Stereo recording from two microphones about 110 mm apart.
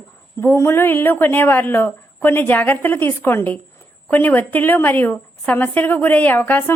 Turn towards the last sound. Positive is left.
turn(degrees=15)  # may be behind; listen again after turning